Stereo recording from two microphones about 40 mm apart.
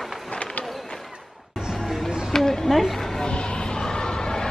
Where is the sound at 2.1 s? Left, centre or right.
Centre.